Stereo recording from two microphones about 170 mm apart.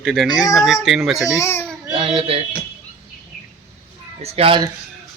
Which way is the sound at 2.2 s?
35° right (ahead or behind).